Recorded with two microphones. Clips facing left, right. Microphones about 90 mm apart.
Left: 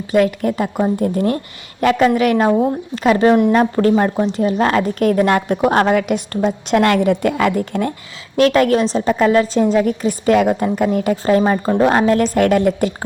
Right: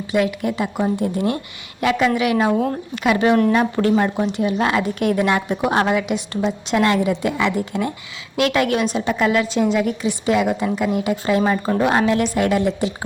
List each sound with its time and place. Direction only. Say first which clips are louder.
0.1 s a woman's voice: left 5 dB; 45° left (ahead or behind)